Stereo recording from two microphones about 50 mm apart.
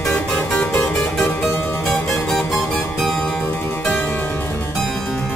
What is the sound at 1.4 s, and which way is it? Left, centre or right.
Music, left.